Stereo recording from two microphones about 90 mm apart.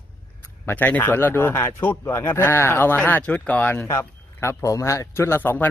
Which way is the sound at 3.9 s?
30° left (ahead or behind).